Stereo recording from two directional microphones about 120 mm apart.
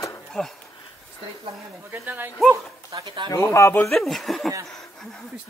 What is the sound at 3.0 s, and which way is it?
Speech, 40° right (ahead or behind).